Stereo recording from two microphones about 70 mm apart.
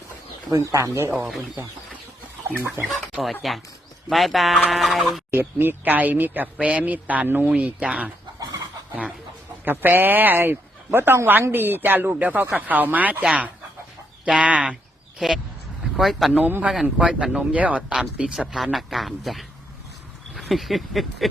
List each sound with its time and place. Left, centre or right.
0.5 s speech: right
2.8 s speech: centre
4.1 s fowl: centre
5.3 s speech: right; by 8.1 s centre
9.6 s speech: right
15.2 s speech: centre
16.3 s speech: right
18.3 s fowl: centre
20.3 s a sound: centre